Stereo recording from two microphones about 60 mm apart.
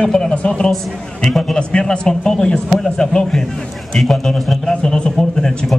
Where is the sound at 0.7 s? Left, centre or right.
Centre.